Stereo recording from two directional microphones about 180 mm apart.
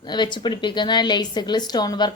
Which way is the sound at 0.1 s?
25° left (ahead or behind).